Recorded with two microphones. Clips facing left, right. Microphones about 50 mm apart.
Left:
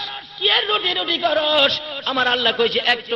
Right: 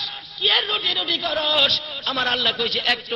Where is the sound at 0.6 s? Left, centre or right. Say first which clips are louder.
Left 5 dB; centre.